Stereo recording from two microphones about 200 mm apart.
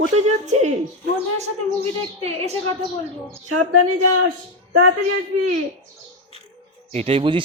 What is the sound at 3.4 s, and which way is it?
Speech, 90° right.